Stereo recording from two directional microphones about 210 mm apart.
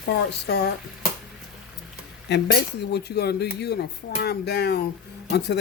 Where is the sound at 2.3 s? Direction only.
55° left (ahead or behind).